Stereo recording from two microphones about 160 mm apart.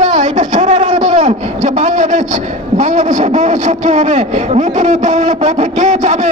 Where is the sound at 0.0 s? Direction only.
50° right (ahead or behind).